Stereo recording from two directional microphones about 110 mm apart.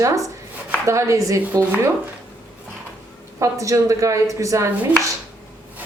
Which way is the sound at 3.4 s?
30° right (ahead or behind).